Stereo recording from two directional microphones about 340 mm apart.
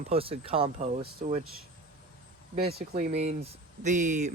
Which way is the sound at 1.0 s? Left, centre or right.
Right.